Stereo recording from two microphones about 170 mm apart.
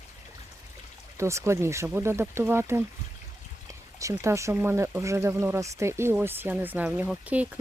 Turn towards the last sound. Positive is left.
turn(degrees=-10)  # may be behind; listen again after turning